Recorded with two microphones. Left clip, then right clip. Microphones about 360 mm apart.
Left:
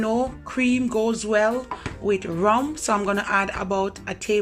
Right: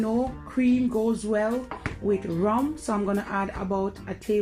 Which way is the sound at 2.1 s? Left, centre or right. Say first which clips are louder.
Left 5 dB; left.